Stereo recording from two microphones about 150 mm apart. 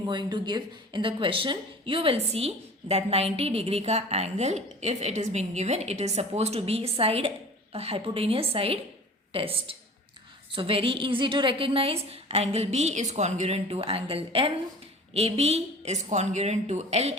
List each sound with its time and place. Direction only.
0.0 s a woman's voice: 30° right (ahead or behind); by 17.2 s 45° right (ahead or behind)